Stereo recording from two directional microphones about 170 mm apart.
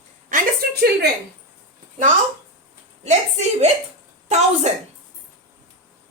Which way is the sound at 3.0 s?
40° right (ahead or behind).